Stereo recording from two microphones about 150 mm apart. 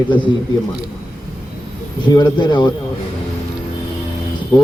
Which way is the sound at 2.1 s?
30° left (ahead or behind).